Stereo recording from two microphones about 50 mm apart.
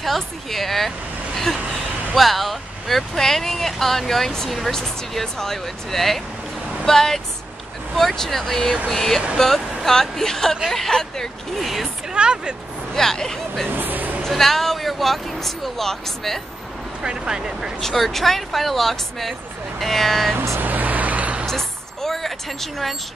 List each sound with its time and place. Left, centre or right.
0.0 s speech: centre
12.1 s speech: centre
12.9 s speech: centre
13.7 s vehicle: right
14.2 s speech: centre
17.0 s speech: centre
17.7 s speech: centre
20.6 s vehicle: right
21.5 s vehicle: centre